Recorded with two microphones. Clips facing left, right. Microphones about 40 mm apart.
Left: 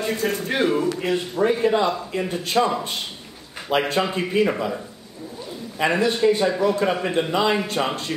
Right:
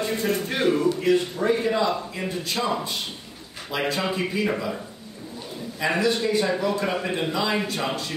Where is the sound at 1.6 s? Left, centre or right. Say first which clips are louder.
Left 3 dB; left.